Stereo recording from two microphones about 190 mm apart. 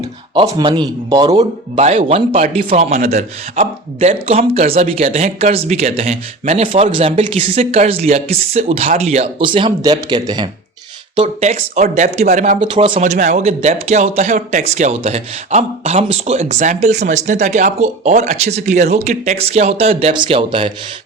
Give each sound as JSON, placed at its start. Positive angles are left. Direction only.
{"t": 0.3, "sound": "speech", "side_deg": -25}
{"t": 1.4, "sound": "speech", "side_deg": -35}
{"t": 11.2, "sound": "speech", "side_deg": -35}
{"t": 12.7, "sound": "speech", "side_deg": -25}
{"t": 13.0, "sound": "speech", "side_deg": -40}